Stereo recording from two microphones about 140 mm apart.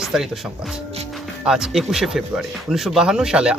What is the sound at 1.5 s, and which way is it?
A man's voice, 5° right (ahead or behind).